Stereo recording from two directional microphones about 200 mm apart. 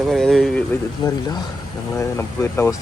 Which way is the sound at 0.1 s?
Centre (ahead or behind).